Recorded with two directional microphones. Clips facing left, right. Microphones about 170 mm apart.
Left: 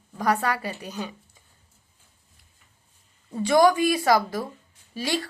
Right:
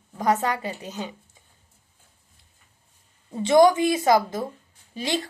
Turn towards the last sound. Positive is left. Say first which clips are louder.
# even
turn(degrees=-20)  # may be behind; listen again after turning